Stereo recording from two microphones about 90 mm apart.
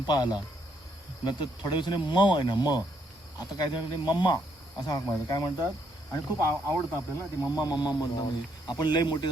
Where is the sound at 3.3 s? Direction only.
45° left (ahead or behind).